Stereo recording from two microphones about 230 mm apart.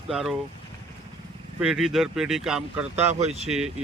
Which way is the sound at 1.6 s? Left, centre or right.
Centre.